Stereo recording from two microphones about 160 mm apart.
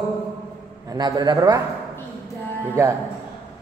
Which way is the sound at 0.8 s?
25° right (ahead or behind).